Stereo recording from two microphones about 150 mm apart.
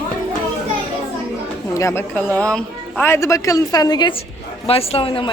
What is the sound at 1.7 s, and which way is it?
A woman's voice, 20° left (ahead or behind).